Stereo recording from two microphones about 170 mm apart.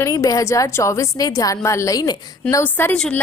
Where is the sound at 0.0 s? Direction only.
20° left (ahead or behind).